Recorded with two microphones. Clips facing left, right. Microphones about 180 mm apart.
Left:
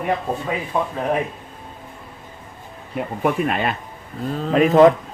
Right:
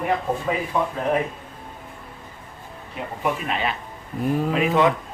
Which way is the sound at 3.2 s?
50° left (ahead or behind).